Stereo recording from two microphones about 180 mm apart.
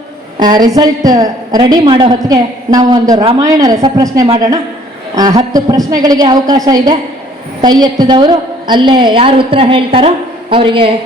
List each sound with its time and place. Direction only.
0.3 s a woman's voice: 25° right (ahead or behind)